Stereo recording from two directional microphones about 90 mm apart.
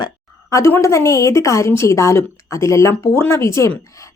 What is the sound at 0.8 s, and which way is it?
A woman's voice, 35° left (ahead or behind).